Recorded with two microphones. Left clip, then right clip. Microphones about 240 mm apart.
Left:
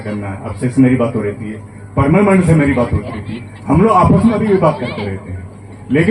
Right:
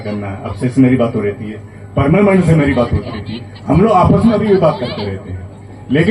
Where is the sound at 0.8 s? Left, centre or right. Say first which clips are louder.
Right 1 dB; right.